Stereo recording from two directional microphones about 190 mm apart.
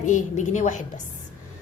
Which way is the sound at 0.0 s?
40° left (ahead or behind).